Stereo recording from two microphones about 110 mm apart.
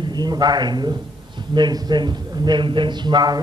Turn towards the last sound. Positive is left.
turn(degrees=-40)  # may be behind; listen again after turning